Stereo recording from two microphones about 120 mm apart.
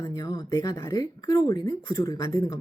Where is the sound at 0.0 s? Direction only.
30° left (ahead or behind).